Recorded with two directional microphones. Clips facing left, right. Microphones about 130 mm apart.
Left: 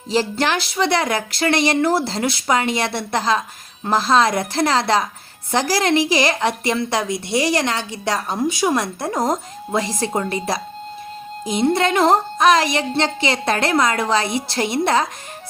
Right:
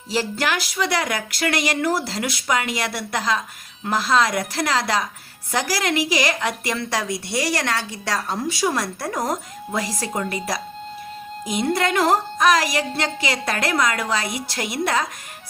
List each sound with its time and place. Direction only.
0.1 s a woman's voice: 25° left (ahead or behind)